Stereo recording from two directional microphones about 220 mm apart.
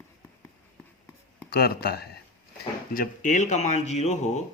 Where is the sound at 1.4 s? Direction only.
45° left (ahead or behind).